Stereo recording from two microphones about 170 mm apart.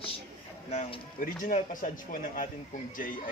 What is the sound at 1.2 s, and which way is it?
Speech, 50° left (ahead or behind).